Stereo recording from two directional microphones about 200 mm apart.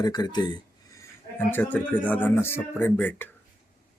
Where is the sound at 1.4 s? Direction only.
10° left (ahead or behind).